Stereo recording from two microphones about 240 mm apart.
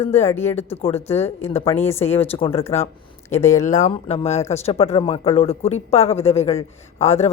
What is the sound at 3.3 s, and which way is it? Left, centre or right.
Speech, centre.